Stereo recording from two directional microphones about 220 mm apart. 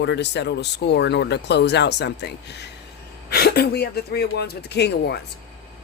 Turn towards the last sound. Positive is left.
turn(degrees=50)  # may be behind; listen again after turning